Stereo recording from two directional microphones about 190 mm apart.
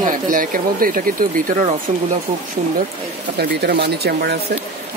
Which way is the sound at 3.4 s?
60° right (ahead or behind).